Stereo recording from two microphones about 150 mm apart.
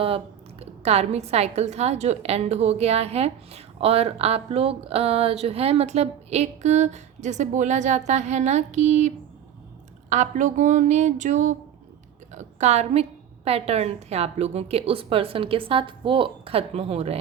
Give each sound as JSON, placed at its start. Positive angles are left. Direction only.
{"t": 0.6, "sound": "a woman's voice", "side_deg": -45}